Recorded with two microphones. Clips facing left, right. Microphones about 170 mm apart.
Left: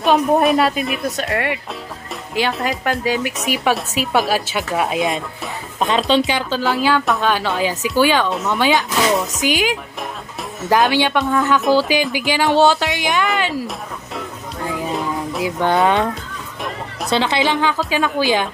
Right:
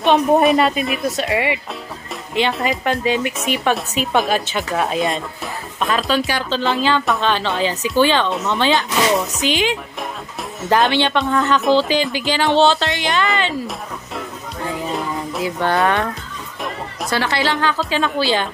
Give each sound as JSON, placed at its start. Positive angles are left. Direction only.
{"t": 0.0, "sound": "speech", "side_deg": 0}
{"t": 5.9, "sound": "speech", "side_deg": 25}
{"t": 6.6, "sound": "speech", "side_deg": 5}
{"t": 14.9, "sound": "a sound", "side_deg": 0}
{"t": 15.4, "sound": "speech", "side_deg": 15}
{"t": 17.1, "sound": "speech", "side_deg": 20}